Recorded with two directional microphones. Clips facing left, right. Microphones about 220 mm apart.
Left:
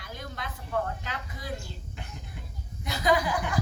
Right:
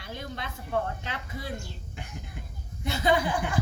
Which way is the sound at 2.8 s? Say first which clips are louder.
Right 1 dB; 25° right (ahead or behind).